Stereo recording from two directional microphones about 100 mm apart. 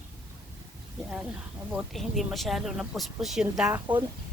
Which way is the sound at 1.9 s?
Centre (ahead or behind).